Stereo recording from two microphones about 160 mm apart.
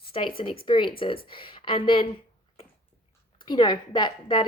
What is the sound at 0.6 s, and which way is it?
A woman's voice, 30° left (ahead or behind).